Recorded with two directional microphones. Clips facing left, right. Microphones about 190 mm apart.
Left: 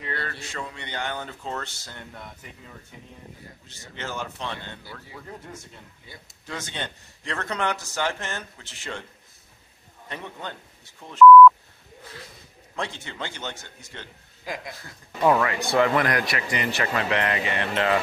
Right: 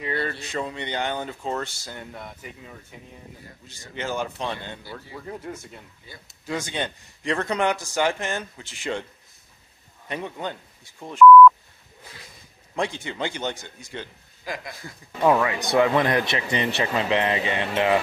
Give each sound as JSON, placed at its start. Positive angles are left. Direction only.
{"t": 0.0, "sound": "a man's voice", "side_deg": -15}
{"t": 3.6, "sound": "a man's voice", "side_deg": -15}
{"t": 6.4, "sound": "a man's voice", "side_deg": -10}
{"t": 10.0, "sound": "a man's voice", "side_deg": -15}
{"t": 12.7, "sound": "a man's voice", "side_deg": -15}